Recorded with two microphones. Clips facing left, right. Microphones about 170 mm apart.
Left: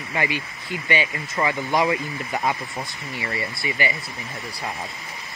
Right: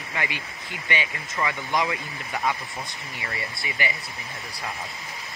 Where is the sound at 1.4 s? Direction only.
30° left (ahead or behind).